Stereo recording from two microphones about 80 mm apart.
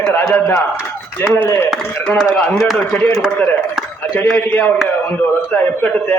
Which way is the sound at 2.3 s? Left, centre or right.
Centre.